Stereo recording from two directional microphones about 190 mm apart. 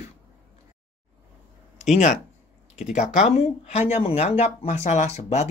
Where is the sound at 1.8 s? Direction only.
35° left (ahead or behind).